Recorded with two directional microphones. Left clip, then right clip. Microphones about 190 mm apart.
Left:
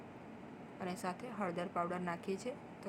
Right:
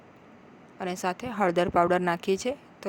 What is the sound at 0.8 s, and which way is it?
A woman's voice, 45° right (ahead or behind).